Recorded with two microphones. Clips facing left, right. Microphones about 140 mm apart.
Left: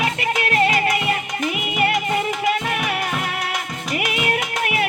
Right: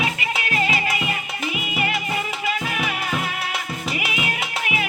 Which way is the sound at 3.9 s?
50° left (ahead or behind).